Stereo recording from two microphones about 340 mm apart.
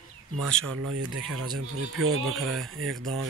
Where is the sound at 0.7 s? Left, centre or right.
Right.